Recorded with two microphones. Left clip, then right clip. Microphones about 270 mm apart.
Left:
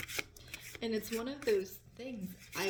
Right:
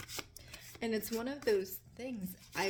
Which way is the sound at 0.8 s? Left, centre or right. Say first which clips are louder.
Right 1 dB; right.